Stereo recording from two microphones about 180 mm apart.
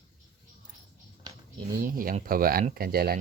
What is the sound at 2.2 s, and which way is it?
Speech, 55° right (ahead or behind).